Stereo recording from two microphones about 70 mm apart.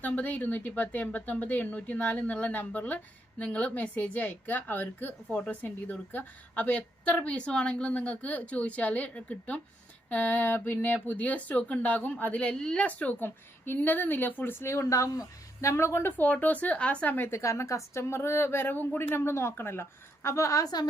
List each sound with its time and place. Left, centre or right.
0.0 s speech: left
15.7 s speech: left
16.1 s speech: left
17.3 s speech: left